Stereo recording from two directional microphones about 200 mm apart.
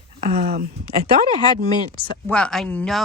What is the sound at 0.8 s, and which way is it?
Speech, 25° left (ahead or behind).